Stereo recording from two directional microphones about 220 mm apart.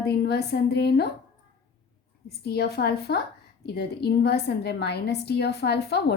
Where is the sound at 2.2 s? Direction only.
45° left (ahead or behind).